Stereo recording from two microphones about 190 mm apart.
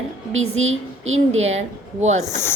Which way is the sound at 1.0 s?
90° right.